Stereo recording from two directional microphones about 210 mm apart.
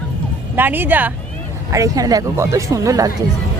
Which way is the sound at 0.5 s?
10° right (ahead or behind).